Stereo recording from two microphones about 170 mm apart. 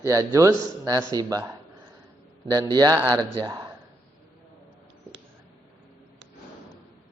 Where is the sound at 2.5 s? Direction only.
25° right (ahead or behind).